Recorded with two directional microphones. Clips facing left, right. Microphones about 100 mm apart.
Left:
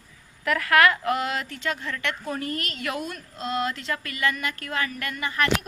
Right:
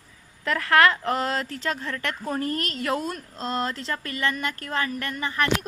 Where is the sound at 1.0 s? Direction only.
35° right (ahead or behind).